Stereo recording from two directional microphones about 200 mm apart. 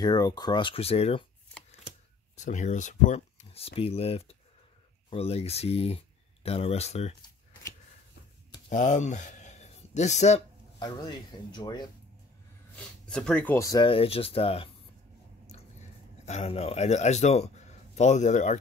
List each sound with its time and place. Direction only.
0.0 s speech: 20° left (ahead or behind)
2.3 s speech: 35° left (ahead or behind)
8.6 s speech: 40° left (ahead or behind)
10.8 s speech: 20° left (ahead or behind)
12.7 s speech: 5° left (ahead or behind); by 14.7 s 30° left (ahead or behind)
16.3 s speech: 30° left (ahead or behind)